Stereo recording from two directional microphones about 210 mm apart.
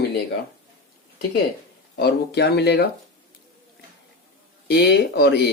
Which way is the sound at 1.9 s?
50° left (ahead or behind).